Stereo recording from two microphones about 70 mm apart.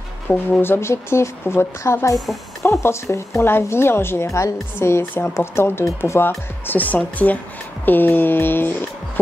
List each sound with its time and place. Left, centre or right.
0.6 s speech: left